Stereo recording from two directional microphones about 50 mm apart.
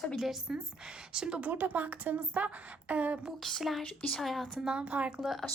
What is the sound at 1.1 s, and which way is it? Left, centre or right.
Speech, centre.